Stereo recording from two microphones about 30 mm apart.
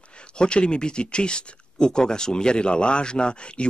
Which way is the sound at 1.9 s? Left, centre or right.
Left.